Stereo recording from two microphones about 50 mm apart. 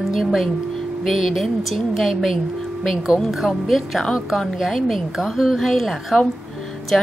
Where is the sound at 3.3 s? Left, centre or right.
Centre.